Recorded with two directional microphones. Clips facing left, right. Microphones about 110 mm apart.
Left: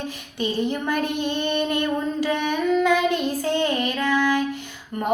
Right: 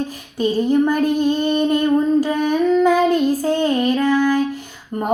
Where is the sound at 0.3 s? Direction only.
40° right (ahead or behind).